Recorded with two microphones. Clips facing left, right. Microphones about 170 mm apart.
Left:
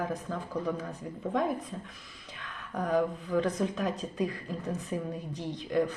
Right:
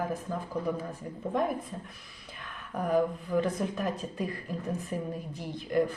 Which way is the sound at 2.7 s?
10° right (ahead or behind).